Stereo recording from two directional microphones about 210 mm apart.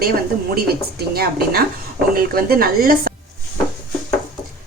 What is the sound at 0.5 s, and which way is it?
A woman's voice, 45° right (ahead or behind).